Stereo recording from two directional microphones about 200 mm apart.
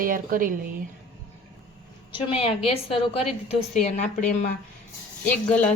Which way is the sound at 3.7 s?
35° left (ahead or behind).